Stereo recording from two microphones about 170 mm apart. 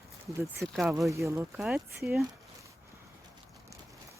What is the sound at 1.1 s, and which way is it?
Speech, 15° right (ahead or behind).